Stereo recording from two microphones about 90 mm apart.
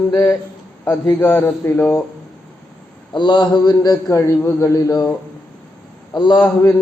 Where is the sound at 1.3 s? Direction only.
25° left (ahead or behind).